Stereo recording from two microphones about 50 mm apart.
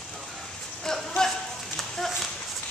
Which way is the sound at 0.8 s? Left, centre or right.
Centre.